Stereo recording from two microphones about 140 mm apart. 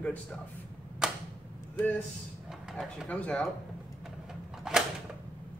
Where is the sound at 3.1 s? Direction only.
10° left (ahead or behind).